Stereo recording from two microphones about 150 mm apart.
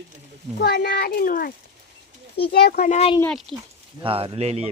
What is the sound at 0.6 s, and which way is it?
Speech, 90° left.